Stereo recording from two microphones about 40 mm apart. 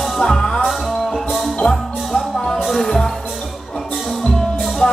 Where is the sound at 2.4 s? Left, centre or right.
Centre.